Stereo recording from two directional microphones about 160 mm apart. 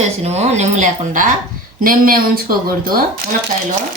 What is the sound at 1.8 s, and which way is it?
Speech, 65° right (ahead or behind).